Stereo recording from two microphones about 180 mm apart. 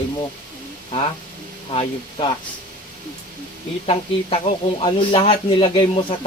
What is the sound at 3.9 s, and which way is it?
Speech, 35° left (ahead or behind).